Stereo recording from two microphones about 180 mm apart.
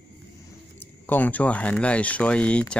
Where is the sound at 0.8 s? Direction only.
10° left (ahead or behind).